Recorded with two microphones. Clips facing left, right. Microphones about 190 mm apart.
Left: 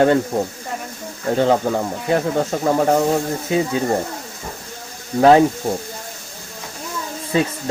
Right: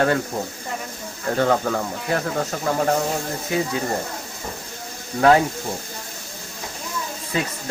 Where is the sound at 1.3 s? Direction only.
20° left (ahead or behind).